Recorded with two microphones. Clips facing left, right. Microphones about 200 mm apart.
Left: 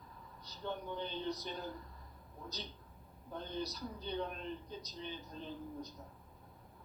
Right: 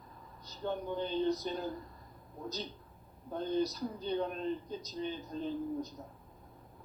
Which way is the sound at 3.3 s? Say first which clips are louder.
Right 9 dB; 45° right (ahead or behind).